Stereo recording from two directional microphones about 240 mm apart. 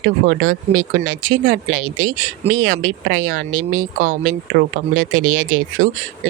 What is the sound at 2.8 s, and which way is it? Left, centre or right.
Speech, right.